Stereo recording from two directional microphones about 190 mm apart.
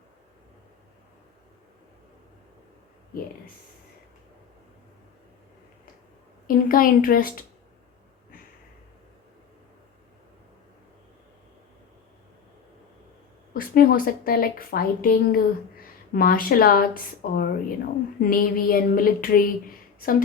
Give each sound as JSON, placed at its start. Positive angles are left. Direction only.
{"t": 6.5, "sound": "speech", "side_deg": 50}
{"t": 13.5, "sound": "speech", "side_deg": 50}